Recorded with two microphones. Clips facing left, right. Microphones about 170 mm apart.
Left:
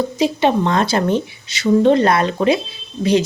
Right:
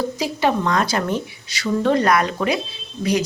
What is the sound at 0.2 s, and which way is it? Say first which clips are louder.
A woman's voice: left 6 dB; 25° left (ahead or behind).